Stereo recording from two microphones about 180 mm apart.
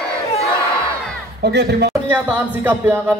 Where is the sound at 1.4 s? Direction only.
65° right (ahead or behind).